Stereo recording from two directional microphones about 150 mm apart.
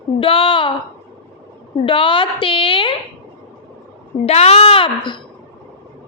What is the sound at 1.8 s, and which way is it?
A woman's voice, 35° left (ahead or behind).